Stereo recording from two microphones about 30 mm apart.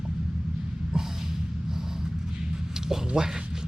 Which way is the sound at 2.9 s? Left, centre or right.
Right.